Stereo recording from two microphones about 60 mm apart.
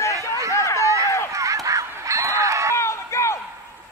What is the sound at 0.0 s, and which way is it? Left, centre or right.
Chatter, left.